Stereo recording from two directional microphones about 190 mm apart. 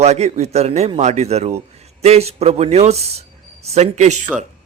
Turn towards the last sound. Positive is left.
turn(degrees=-35)  # may be behind; listen again after turning